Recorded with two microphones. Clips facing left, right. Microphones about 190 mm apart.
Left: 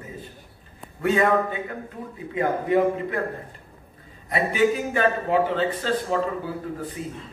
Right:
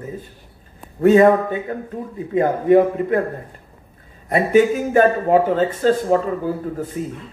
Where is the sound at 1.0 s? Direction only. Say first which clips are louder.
Right 10 dB; 45° right (ahead or behind).